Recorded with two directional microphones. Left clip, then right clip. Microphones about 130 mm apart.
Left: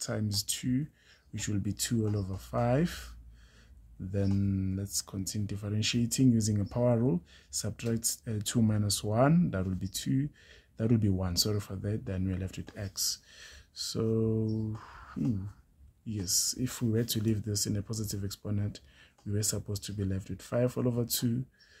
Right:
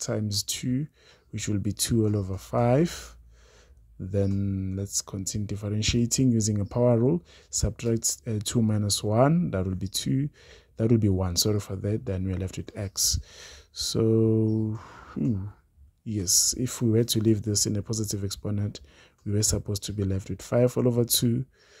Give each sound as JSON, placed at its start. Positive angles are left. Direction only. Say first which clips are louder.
{"t": 0.0, "sound": "speech", "louder": "right 5 dB", "side_deg": -45}
{"t": 4.4, "sound": "speech", "louder": "right 2 dB", "side_deg": -25}
{"t": 4.7, "sound": "speech", "louder": "right 5 dB", "side_deg": -45}